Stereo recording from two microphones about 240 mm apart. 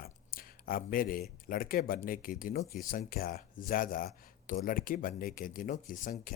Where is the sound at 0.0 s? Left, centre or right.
Left.